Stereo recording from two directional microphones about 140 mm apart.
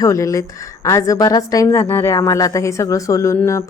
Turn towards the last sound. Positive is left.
turn(degrees=20)  # may be behind; listen again after turning